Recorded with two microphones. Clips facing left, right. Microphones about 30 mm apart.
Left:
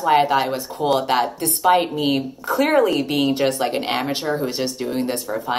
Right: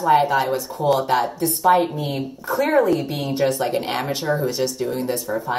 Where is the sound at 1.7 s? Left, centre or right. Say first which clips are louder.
Left 1 dB; left.